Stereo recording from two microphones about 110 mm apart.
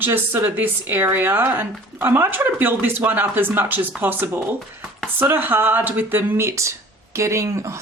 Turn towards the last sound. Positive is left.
turn(degrees=-25)  # may be behind; listen again after turning